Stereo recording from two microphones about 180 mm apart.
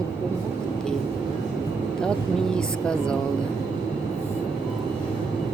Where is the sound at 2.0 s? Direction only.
5° left (ahead or behind).